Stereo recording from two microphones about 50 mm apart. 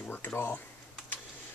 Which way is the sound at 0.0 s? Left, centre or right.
Left.